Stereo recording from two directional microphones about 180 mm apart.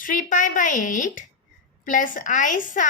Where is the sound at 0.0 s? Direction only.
45° left (ahead or behind).